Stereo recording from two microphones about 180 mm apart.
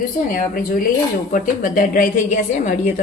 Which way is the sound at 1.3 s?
45° left (ahead or behind).